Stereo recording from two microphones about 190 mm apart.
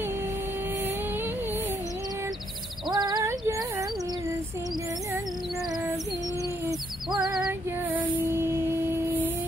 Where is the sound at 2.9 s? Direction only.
20° right (ahead or behind).